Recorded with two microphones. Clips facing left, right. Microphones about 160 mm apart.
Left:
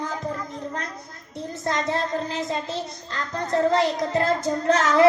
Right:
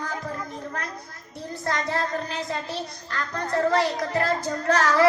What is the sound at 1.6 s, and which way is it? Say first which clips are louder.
Child singing: left 2 dB; 20° left (ahead or behind).